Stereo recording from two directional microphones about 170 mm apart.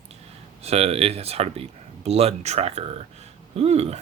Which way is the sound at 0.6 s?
35° right (ahead or behind).